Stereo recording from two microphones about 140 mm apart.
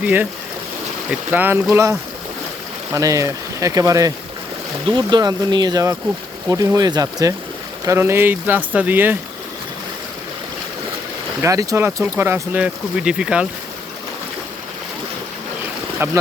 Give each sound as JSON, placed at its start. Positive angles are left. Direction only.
{"t": 0.0, "sound": "speech", "side_deg": -15}
{"t": 1.3, "sound": "speech", "side_deg": -15}
{"t": 11.4, "sound": "speech", "side_deg": -25}
{"t": 16.0, "sound": "speech", "side_deg": -15}